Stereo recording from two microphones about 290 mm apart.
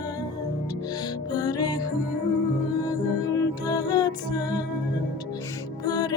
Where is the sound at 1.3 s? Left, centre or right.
Centre.